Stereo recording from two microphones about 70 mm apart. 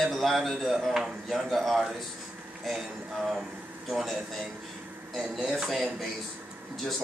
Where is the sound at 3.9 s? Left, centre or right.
Centre.